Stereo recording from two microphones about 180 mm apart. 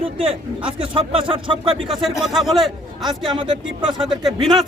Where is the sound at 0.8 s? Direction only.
30° right (ahead or behind).